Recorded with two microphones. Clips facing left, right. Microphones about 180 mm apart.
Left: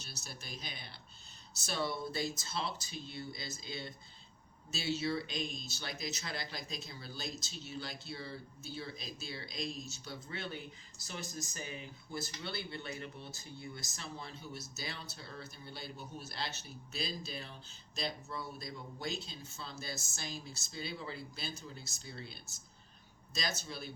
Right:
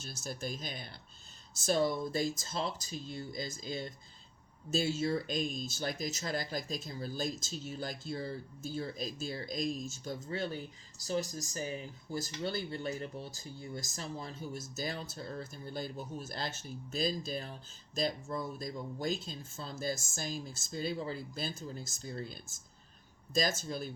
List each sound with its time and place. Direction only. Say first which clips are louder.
0.0 s speech: right 10 dB; 50° right (ahead or behind)